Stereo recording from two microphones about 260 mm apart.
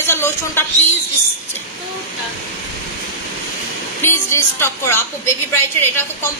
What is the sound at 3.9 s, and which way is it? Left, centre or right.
A woman's voice, centre.